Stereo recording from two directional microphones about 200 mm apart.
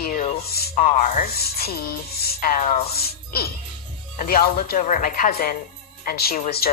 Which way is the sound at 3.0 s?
50° left (ahead or behind).